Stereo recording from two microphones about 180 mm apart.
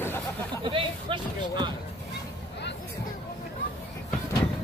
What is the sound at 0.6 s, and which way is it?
Speech, 30° right (ahead or behind).